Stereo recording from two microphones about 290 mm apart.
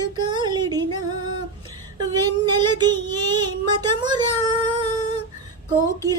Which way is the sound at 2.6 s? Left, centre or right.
Centre.